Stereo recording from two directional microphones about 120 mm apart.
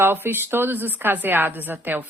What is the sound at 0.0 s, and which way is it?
A woman's voice, 20° right (ahead or behind).